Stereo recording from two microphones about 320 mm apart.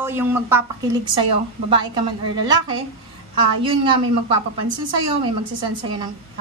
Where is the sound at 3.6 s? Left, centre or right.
Centre.